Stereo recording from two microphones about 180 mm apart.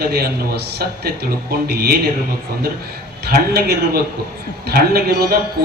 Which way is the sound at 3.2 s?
60° right (ahead or behind).